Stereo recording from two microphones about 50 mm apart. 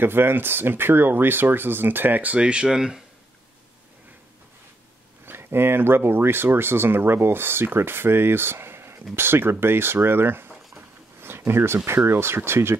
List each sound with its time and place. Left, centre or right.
0.0 s speech: right; by 3.0 s centre
5.2 s speech: right